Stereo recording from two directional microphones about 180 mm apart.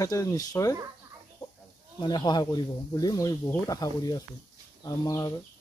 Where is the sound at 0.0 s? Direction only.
15° left (ahead or behind).